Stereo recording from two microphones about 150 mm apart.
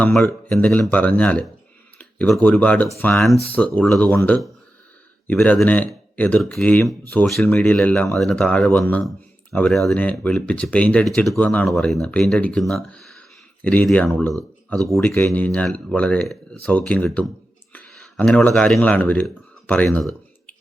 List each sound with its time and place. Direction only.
0.0 s speech: 5° left (ahead or behind)
15.0 s speech: 15° left (ahead or behind)
17.7 s a sound: 10° left (ahead or behind)